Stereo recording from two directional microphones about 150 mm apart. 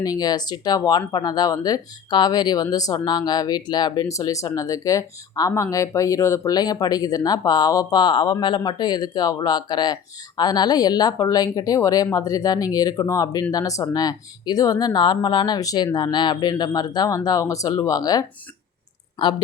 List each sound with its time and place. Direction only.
0.0 s speech: 25° left (ahead or behind)